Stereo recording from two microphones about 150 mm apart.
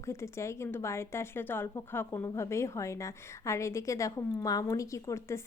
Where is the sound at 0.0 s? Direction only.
20° left (ahead or behind).